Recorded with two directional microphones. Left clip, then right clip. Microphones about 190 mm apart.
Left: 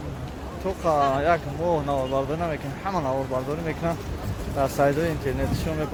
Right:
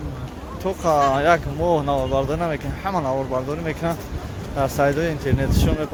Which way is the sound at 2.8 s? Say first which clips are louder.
Right 3 dB; 20° right (ahead or behind).